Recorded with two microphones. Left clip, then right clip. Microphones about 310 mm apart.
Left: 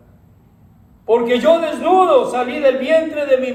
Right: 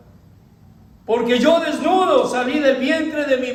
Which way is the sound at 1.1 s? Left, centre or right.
Left.